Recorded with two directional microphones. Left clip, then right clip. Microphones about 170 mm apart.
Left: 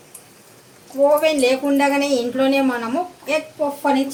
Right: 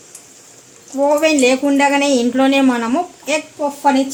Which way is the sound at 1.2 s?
60° right (ahead or behind).